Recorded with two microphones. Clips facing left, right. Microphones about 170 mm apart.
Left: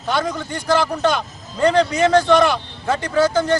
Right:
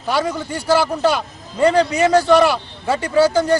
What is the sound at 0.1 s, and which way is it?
A man's voice, 10° right (ahead or behind).